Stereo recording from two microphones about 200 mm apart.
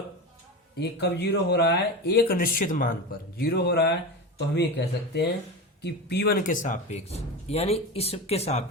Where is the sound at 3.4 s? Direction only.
55° left (ahead or behind).